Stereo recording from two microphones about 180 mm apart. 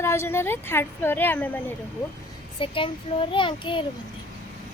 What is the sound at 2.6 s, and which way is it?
A child's voice, 30° left (ahead or behind).